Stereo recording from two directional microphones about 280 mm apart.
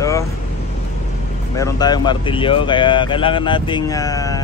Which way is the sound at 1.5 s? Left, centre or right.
Centre.